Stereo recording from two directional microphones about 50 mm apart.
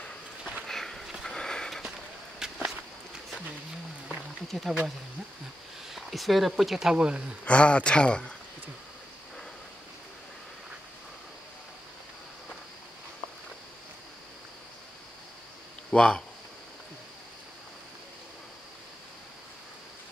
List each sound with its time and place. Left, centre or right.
0.7 s a sound: centre
1.2 s sniff: centre
2.3 s walk: centre
4.1 s a sound: centre
5.9 s speech: centre
7.4 s speech: left
15.9 s speech: centre